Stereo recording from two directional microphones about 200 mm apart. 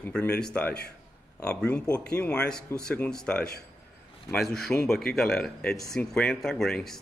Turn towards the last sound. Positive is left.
turn(degrees=5)  # may be behind; listen again after turning